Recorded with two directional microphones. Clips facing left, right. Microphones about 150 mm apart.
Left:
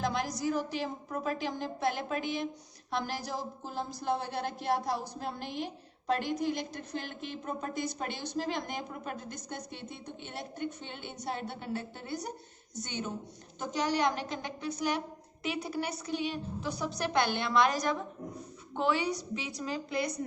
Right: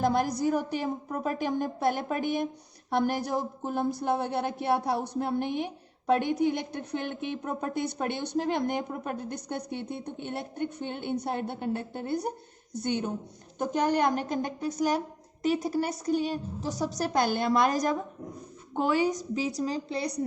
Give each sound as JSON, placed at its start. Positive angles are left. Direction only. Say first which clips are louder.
{"t": 0.0, "sound": "a woman's voice", "louder": "right 6 dB", "side_deg": -50}